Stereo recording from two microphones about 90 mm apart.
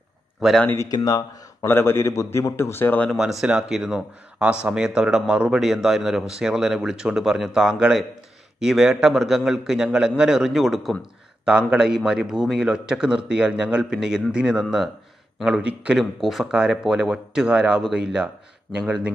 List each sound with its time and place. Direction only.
0.4 s speech: centre (ahead or behind)
0.8 s speech: 45° left (ahead or behind)
1.6 s a man's voice: 25° left (ahead or behind)
3.2 s a man's voice: 5° right (ahead or behind)